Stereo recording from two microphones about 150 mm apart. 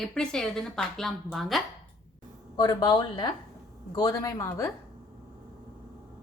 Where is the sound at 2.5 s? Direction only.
30° left (ahead or behind).